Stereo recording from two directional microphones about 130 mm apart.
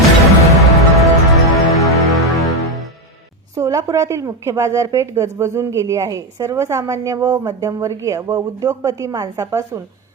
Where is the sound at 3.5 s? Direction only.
25° right (ahead or behind).